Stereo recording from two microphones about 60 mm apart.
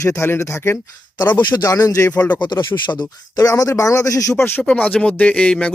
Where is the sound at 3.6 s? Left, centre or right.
Left.